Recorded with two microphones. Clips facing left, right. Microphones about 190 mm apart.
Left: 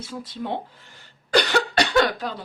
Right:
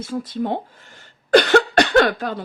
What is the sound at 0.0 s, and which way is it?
Speech, 50° right (ahead or behind).